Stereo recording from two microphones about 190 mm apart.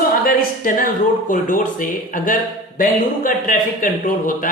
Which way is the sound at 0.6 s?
45° left (ahead or behind).